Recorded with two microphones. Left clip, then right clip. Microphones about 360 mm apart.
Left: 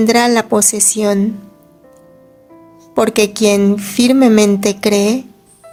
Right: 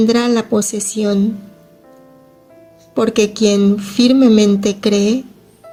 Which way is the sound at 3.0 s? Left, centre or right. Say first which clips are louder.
Left 2 dB; centre.